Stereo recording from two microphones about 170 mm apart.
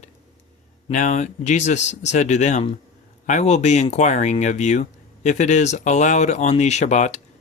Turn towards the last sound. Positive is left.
turn(degrees=45)  # may be behind; listen again after turning